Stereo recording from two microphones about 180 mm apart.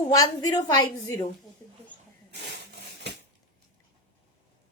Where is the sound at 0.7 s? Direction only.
15° left (ahead or behind).